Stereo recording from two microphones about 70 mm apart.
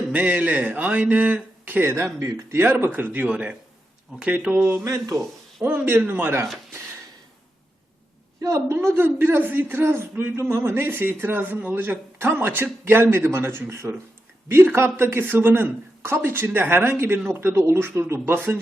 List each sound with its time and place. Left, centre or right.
0.1 s speech: right
4.8 s a man's voice: right
5.6 s a man's voice: right
8.4 s a woman's voice: right
8.7 s a man's voice: right